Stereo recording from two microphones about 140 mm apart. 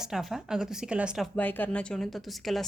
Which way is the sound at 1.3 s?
10° left (ahead or behind).